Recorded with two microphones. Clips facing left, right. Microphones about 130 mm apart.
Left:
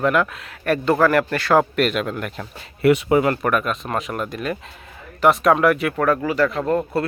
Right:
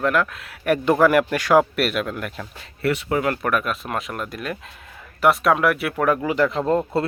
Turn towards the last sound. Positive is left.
turn(degrees=-20)  # may be behind; listen again after turning